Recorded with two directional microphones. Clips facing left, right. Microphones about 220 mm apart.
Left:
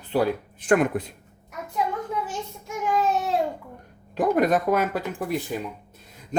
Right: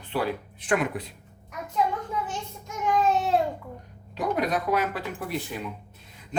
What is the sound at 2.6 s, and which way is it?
Child singing, 5° left (ahead or behind).